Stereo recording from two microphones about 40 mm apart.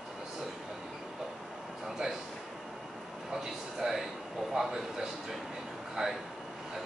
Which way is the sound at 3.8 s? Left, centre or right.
Centre.